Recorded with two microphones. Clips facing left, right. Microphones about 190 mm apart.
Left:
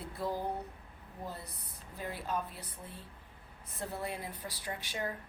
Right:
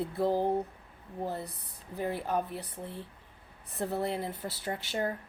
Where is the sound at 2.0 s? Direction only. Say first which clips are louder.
Right 6 dB; 60° right (ahead or behind).